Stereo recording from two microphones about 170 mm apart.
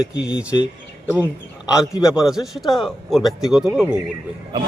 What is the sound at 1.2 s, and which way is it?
A man's voice, 5° right (ahead or behind).